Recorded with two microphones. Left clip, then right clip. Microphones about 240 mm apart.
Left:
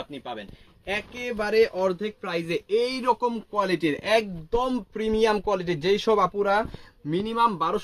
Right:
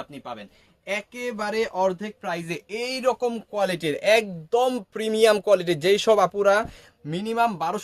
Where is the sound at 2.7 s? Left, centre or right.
Right.